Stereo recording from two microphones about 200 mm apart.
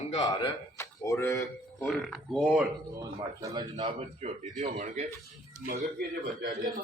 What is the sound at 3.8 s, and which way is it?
A man's voice, 35° right (ahead or behind).